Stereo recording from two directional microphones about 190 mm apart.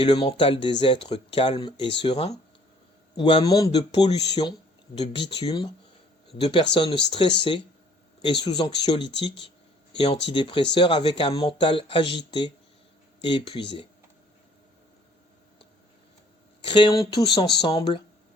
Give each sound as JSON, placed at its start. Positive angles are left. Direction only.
{"t": 0.0, "sound": "speech", "side_deg": 25}
{"t": 16.6, "sound": "speech", "side_deg": 25}